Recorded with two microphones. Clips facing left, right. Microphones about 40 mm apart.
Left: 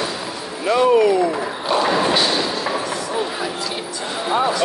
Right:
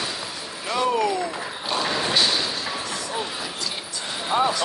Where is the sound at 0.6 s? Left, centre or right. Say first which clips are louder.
Left 8 dB; left.